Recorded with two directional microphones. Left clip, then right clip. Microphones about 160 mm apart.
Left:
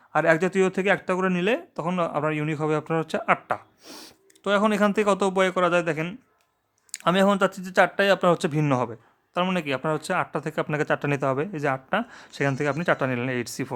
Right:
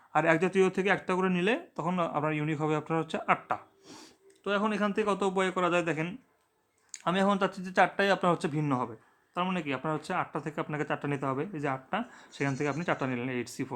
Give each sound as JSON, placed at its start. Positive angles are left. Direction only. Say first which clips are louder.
{"t": 0.1, "sound": "speech", "louder": "left 5 dB", "side_deg": 15}
{"t": 3.8, "sound": "speech", "louder": "left 7 dB", "side_deg": 45}